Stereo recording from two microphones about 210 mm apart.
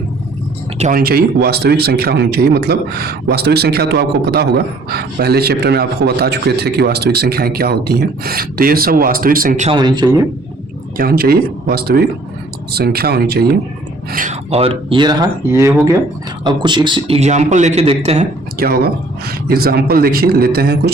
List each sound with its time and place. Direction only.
0.8 s speech: 40° right (ahead or behind)
9.6 s speech: 20° right (ahead or behind)
10.9 s speech: 45° right (ahead or behind)
14.1 s speech: 40° right (ahead or behind)
18.6 s speech: 45° right (ahead or behind)